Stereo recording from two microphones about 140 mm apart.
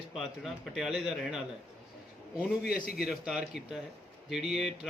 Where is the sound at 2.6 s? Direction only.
90° left.